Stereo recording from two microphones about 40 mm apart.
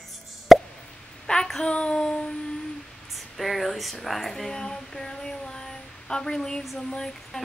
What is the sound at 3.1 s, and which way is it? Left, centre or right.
A woman's voice, centre.